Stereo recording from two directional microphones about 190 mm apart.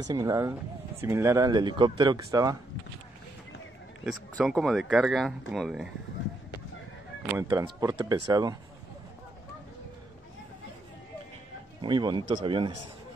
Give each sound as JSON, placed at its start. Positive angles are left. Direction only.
{"t": 0.0, "sound": "speech", "side_deg": -20}
{"t": 4.0, "sound": "speech", "side_deg": 0}
{"t": 7.3, "sound": "speech", "side_deg": -20}
{"t": 11.8, "sound": "speech", "side_deg": -25}